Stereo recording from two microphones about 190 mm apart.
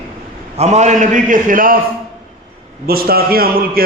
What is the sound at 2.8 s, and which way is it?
A man's voice, 50° right (ahead or behind).